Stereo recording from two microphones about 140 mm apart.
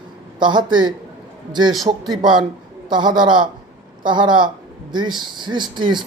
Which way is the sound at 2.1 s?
30° right (ahead or behind).